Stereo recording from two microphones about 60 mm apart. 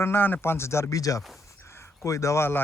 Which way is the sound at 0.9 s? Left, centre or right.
Left.